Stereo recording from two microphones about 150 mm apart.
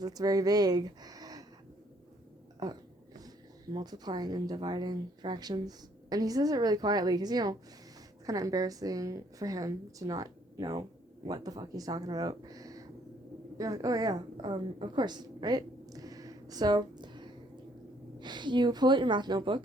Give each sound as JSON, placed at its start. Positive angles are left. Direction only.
{"t": 0.0, "sound": "speech", "side_deg": -25}
{"t": 3.2, "sound": "a woman's voice", "side_deg": -25}